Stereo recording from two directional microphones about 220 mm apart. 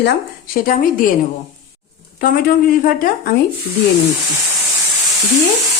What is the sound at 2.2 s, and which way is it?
A woman's voice, 40° left (ahead or behind).